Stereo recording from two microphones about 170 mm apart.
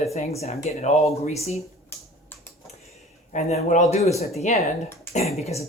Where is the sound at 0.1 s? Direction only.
40° left (ahead or behind).